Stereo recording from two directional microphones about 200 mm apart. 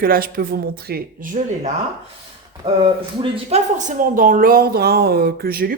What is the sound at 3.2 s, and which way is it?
Speech, 30° right (ahead or behind).